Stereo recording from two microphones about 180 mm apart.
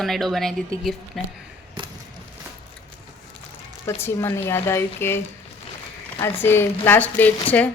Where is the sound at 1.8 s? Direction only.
25° right (ahead or behind).